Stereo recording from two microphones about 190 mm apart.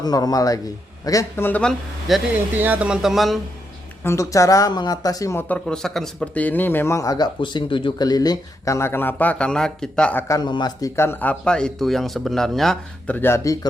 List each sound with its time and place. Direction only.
0.0 s a man's voice: 20° left (ahead or behind); by 3.4 s centre (ahead or behind)
4.0 s speech: 15° left (ahead or behind)